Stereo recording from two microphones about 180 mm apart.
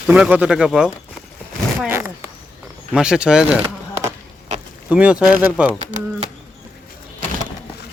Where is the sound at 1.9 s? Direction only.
15° right (ahead or behind).